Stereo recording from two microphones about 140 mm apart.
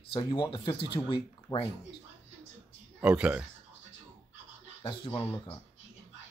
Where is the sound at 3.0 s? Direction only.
5° right (ahead or behind).